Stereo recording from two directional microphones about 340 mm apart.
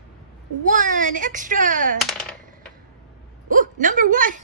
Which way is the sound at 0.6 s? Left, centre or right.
Right.